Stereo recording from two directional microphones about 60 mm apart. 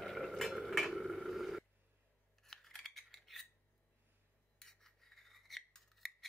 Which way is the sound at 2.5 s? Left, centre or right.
Centre.